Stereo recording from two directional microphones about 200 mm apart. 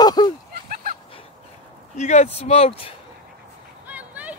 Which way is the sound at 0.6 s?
45° right (ahead or behind).